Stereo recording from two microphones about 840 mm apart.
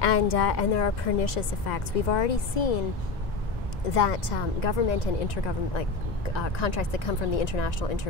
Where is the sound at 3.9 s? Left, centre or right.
Left.